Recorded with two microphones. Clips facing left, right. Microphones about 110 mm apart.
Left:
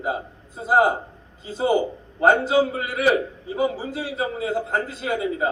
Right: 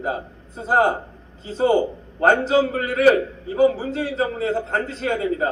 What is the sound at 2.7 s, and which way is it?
Speech, 40° right (ahead or behind).